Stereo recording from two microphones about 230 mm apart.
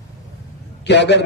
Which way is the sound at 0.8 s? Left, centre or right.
Left.